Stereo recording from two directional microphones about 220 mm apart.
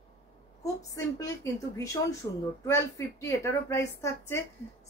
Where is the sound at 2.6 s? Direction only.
15° left (ahead or behind).